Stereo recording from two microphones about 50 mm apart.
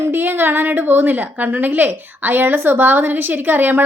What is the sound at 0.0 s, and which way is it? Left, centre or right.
A woman's voice, right.